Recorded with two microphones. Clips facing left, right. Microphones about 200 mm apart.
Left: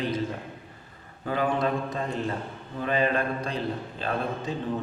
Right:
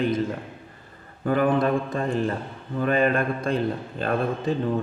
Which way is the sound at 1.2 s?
55° right (ahead or behind).